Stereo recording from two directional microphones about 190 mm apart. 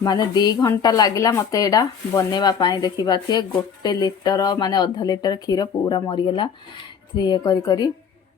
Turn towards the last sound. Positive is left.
turn(degrees=20)  # may be behind; listen again after turning